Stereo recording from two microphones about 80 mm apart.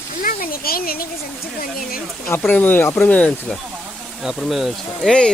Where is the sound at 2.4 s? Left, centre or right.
Left.